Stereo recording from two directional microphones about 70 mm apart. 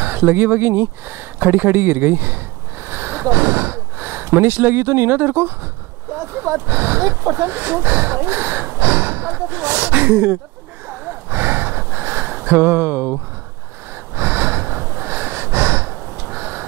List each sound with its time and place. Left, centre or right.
0.0 s speech: right
8.7 s a sound: right
10.9 s gasp: right
11.9 s a sound: right
14.1 s gasp: right
14.8 s gasp: right
15.0 s gasp: right